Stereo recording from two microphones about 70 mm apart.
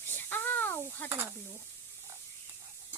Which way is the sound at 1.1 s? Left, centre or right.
Right.